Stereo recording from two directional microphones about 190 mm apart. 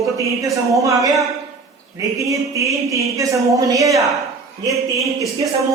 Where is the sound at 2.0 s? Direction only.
15° right (ahead or behind).